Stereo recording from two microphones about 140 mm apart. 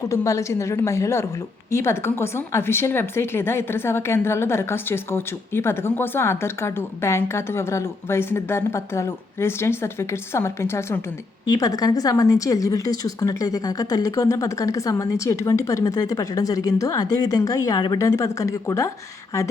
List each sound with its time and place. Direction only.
0.1 s a woman's voice: 20° left (ahead or behind)